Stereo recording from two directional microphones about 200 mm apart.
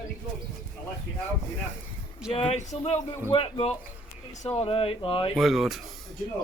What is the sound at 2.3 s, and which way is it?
Speech, 35° left (ahead or behind).